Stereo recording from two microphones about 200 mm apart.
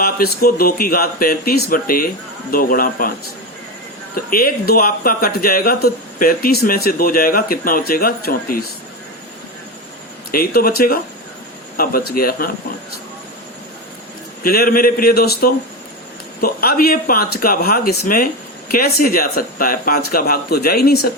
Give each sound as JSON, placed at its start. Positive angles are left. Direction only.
{"t": 0.0, "sound": "speech", "side_deg": 50}
{"t": 4.1, "sound": "speech", "side_deg": 45}
{"t": 10.3, "sound": "speech", "side_deg": 50}
{"t": 14.4, "sound": "speech", "side_deg": 45}